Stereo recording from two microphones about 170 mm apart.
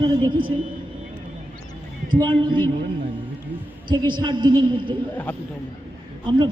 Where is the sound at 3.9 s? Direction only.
25° right (ahead or behind).